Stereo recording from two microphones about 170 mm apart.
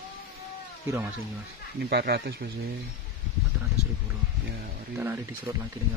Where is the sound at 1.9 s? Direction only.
70° right (ahead or behind).